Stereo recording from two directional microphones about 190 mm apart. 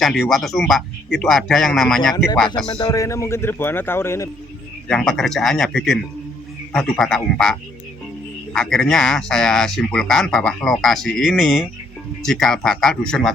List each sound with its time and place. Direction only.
0.0 s speech: centre (ahead or behind)
2.1 s speech: 20° left (ahead or behind)
4.9 s speech: centre (ahead or behind)
8.5 s speech: centre (ahead or behind)